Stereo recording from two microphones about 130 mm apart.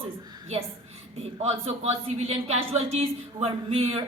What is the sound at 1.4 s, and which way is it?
Speech, 55° right (ahead or behind).